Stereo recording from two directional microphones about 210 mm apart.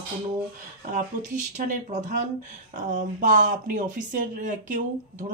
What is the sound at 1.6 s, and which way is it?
Speech, 35° right (ahead or behind).